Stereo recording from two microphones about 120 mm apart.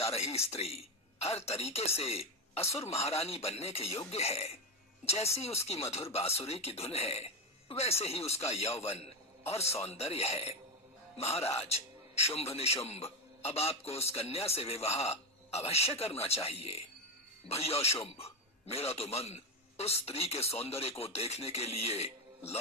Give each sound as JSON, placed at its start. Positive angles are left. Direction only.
{"t": 0.1, "sound": "a man's voice", "side_deg": 60}